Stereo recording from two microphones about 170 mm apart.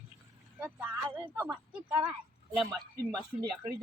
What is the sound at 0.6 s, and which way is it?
Speech, 10° right (ahead or behind).